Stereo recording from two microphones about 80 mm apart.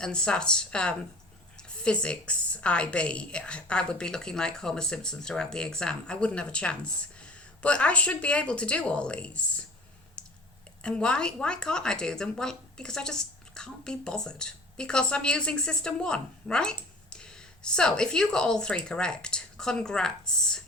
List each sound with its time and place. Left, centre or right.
0.0 s a woman's voice: centre
10.2 s clicking: centre
10.8 s a woman's voice: centre